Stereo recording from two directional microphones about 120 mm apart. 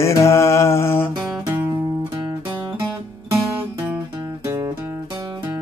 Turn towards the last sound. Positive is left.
turn(degrees=-25)  # may be behind; listen again after turning